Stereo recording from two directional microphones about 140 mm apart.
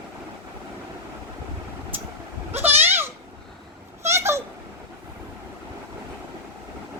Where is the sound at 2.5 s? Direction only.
15° right (ahead or behind).